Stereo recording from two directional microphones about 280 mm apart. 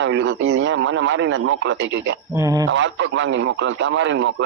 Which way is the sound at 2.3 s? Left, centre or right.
Centre.